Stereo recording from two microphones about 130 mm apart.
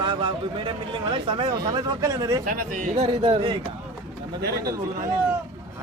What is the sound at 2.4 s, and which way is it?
Speech, 90° right.